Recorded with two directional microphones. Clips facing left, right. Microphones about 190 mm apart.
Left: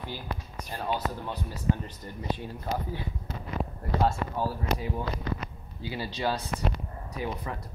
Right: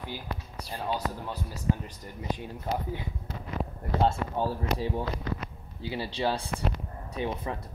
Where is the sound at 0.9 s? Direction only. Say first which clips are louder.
Left 1 dB; 10° right (ahead or behind).